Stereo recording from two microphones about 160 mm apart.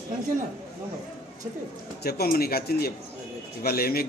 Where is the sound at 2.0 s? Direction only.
75° left (ahead or behind).